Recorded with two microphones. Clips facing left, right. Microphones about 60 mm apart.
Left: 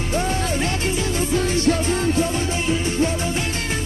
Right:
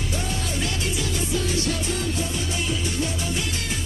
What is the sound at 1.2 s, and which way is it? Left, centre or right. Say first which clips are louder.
Music: left 5 dB; left.